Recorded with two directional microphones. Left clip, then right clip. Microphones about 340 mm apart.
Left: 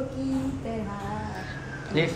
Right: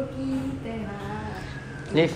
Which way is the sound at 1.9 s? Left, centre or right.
Centre.